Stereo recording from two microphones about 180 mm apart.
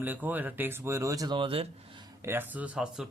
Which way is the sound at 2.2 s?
10° right (ahead or behind).